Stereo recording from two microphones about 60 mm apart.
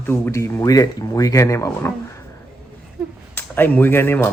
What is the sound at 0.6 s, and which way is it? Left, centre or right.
Speech, left.